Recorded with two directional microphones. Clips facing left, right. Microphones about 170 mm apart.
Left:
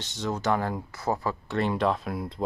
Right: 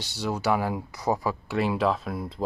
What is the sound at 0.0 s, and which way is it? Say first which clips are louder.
Speech: right 1 dB; 10° right (ahead or behind).